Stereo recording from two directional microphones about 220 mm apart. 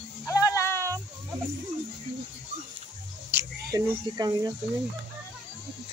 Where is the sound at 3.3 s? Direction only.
10° right (ahead or behind).